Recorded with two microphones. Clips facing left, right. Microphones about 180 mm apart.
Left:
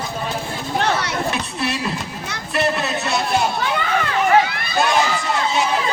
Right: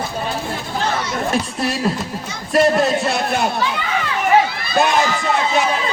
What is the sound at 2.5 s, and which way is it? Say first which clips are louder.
Music: right 7 dB; 45° right (ahead or behind).